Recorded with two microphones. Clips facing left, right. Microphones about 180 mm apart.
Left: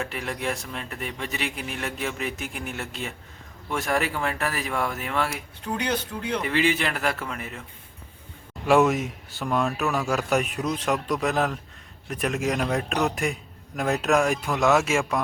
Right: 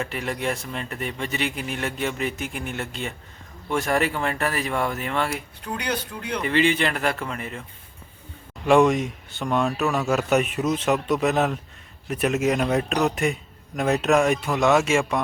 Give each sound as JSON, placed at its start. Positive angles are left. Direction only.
{"t": 0.0, "sound": "a man's voice", "side_deg": 0}
{"t": 5.6, "sound": "speech", "side_deg": 25}
{"t": 6.4, "sound": "a man's voice", "side_deg": 5}
{"t": 8.6, "sound": "a man's voice", "side_deg": 5}